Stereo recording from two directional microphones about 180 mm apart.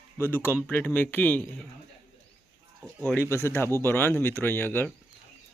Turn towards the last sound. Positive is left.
turn(degrees=10)  # may be behind; listen again after turning